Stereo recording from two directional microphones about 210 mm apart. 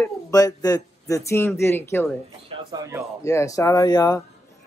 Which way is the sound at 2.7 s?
15° right (ahead or behind).